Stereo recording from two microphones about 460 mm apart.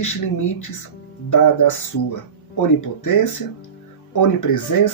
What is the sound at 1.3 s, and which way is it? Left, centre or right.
Speech, left.